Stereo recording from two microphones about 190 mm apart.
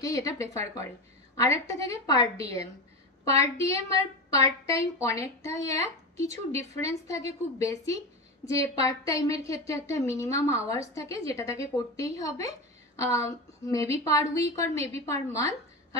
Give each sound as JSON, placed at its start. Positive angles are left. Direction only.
{"t": 0.0, "sound": "a woman's voice", "side_deg": 20}